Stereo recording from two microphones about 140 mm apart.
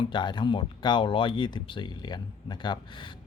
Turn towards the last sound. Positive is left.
turn(degrees=35)  # may be behind; listen again after turning